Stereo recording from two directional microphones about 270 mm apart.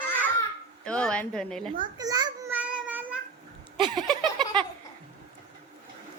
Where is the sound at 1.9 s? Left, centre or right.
Centre.